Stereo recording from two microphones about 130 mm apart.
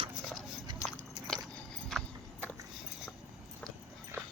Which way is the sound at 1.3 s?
5° left (ahead or behind).